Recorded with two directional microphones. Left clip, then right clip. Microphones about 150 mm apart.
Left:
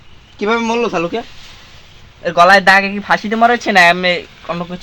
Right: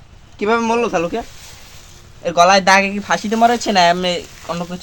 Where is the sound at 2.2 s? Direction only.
40° left (ahead or behind).